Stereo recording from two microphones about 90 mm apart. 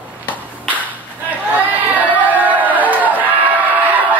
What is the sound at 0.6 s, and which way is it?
Whip, 20° right (ahead or behind).